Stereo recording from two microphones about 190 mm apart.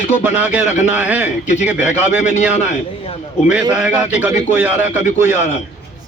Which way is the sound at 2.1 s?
40° left (ahead or behind).